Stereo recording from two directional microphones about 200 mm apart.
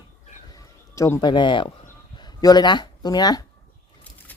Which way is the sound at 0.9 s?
15° left (ahead or behind).